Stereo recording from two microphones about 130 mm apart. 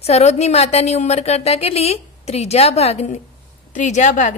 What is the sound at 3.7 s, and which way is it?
Speech, 65° left (ahead or behind).